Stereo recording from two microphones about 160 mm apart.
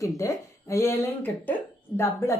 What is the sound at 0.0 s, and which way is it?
Speech, 20° left (ahead or behind).